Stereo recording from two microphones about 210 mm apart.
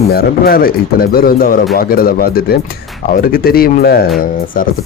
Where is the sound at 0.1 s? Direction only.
45° left (ahead or behind).